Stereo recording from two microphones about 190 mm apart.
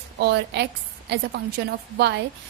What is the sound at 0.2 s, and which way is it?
A woman's voice, 60° right (ahead or behind).